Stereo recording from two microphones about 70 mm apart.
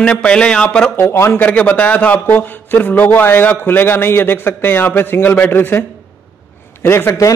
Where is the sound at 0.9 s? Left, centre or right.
Left.